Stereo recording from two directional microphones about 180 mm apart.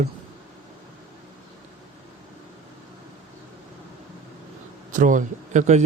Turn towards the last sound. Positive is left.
turn(degrees=-40)  # may be behind; listen again after turning